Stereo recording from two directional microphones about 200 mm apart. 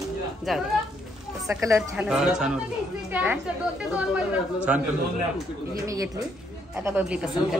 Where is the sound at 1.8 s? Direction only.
Centre (ahead or behind).